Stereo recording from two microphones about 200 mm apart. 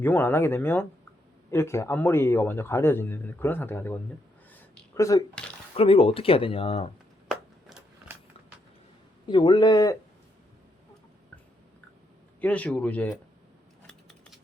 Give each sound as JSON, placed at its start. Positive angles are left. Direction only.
{"t": 0.0, "sound": "speech", "side_deg": 10}
{"t": 4.5, "sound": "a sound", "side_deg": 10}
{"t": 5.3, "sound": "speech", "side_deg": 5}
{"t": 5.7, "sound": "speech", "side_deg": 30}
{"t": 7.3, "sound": "a sound", "side_deg": 0}
{"t": 9.2, "sound": "speech", "side_deg": 20}
{"t": 12.4, "sound": "speech", "side_deg": 5}
{"t": 13.8, "sound": "scissors", "side_deg": 5}